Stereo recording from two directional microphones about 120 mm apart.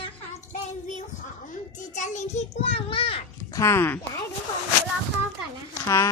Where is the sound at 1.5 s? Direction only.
90° left.